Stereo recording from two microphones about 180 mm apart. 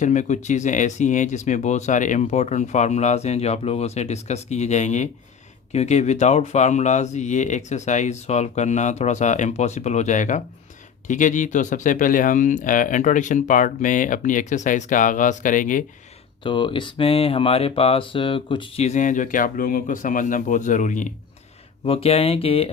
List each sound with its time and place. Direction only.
0.0 s speech: 40° left (ahead or behind)
16.4 s speech: 25° left (ahead or behind); by 21.1 s 45° left (ahead or behind)
21.8 s speech: 35° left (ahead or behind)